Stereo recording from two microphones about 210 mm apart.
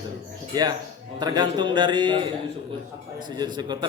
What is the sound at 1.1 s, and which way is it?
Speech, 20° right (ahead or behind).